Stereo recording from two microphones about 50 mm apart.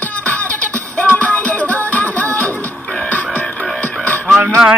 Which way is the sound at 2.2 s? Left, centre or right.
Right.